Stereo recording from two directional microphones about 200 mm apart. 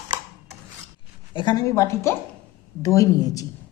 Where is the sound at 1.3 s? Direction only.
20° left (ahead or behind).